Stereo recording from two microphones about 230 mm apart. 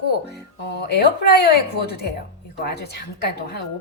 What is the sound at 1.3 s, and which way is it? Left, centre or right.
A woman's voice, left.